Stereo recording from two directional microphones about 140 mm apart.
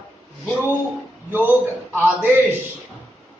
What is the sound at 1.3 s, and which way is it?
Speech, 15° right (ahead or behind).